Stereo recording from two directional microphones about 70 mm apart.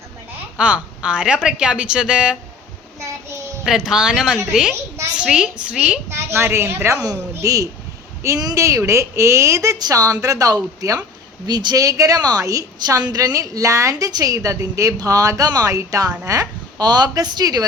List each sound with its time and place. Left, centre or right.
0.5 s speech: centre
3.7 s speech: centre
6.1 s a woman's voice: right
7.0 s a woman's voice: right
9.7 s a woman's voice: right
11.4 s a woman's voice: right
14.1 s a woman's voice: right
15.6 s a woman's voice: right
16.2 s a sound: right
16.8 s speech: right